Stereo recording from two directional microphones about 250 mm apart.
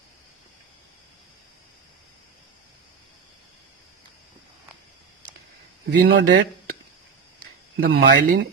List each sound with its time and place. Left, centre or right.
5.9 s speech: right
7.9 s speech: right